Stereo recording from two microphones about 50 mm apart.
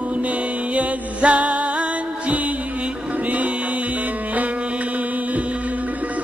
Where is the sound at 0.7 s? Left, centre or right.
Right.